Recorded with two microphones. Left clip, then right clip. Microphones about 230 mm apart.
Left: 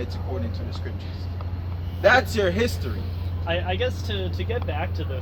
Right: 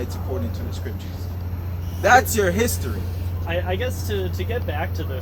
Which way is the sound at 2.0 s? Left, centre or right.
Centre.